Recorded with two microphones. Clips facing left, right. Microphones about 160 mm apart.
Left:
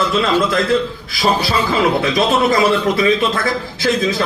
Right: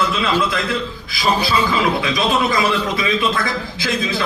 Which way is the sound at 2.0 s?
40° left (ahead or behind).